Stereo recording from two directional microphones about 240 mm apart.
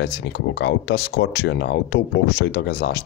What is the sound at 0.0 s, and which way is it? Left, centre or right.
Speech, left.